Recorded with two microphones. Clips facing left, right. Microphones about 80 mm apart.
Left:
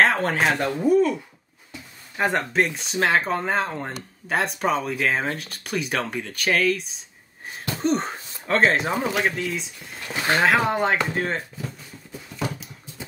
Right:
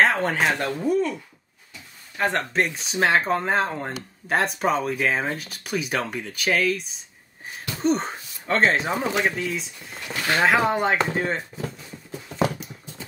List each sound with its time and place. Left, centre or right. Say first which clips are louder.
0.0 s speech: left 1 dB; centre
2.1 s speech: left 1 dB; centre
10.1 s speech: left 2 dB; centre
10.4 s speech: right 1 dB; centre